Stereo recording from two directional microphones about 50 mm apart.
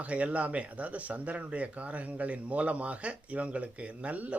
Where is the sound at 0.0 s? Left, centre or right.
Right.